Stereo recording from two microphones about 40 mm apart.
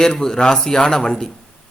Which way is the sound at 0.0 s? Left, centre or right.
Centre.